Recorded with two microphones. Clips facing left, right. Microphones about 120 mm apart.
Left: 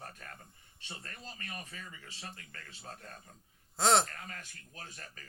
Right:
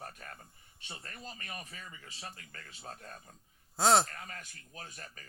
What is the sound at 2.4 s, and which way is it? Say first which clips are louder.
Speech: right 1 dB; 30° right (ahead or behind).